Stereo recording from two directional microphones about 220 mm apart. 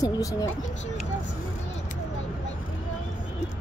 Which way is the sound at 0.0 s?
15° left (ahead or behind).